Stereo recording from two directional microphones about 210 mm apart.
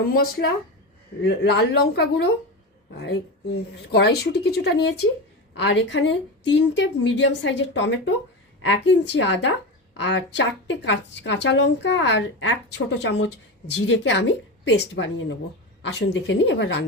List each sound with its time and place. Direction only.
0.4 s a woman's voice: 55° left (ahead or behind)